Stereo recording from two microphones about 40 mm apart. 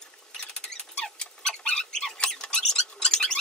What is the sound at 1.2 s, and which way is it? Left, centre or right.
Rodents, centre.